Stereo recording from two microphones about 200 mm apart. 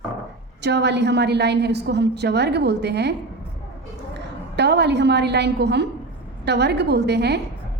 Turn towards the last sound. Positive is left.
turn(degrees=-55)  # may be behind; listen again after turning